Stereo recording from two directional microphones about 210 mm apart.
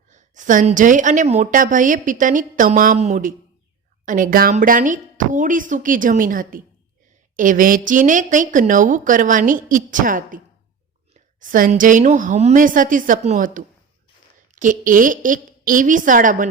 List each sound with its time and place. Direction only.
0.1 s a woman's voice: 35° right (ahead or behind)